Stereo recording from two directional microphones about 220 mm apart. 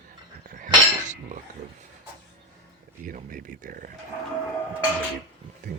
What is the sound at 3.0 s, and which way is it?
Speech, 40° right (ahead or behind).